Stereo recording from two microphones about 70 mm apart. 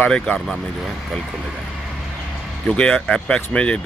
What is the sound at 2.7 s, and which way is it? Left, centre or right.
Speech, centre.